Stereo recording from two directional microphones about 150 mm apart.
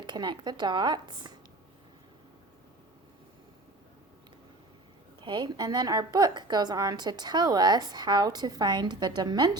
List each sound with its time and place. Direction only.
0.0 s a woman's voice: 30° right (ahead or behind)
5.2 s a woman's voice: 30° right (ahead or behind)